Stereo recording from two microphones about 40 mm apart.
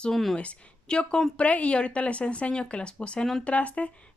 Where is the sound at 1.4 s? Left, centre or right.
Left.